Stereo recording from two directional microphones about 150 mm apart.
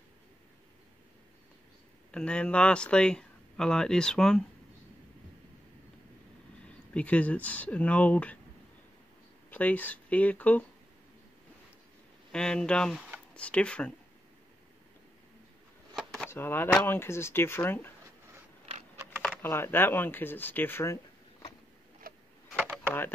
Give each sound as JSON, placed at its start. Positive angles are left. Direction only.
{"t": 2.0, "sound": "speech", "side_deg": 5}
{"t": 6.9, "sound": "speech", "side_deg": 10}
{"t": 9.5, "sound": "speech", "side_deg": 10}
{"t": 12.3, "sound": "speech", "side_deg": 5}
{"t": 15.9, "sound": "a sound", "side_deg": 0}
{"t": 16.3, "sound": "speech", "side_deg": 15}
{"t": 19.2, "sound": "speech", "side_deg": 15}
{"t": 22.0, "sound": "vehicle", "side_deg": -75}